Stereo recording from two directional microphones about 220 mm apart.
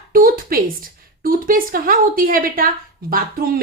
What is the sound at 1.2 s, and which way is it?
A woman's voice, 40° right (ahead or behind).